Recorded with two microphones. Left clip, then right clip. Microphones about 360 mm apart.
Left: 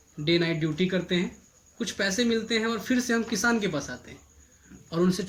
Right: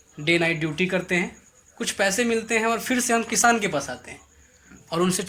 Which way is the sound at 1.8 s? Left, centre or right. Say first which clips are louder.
Right 5 dB; centre.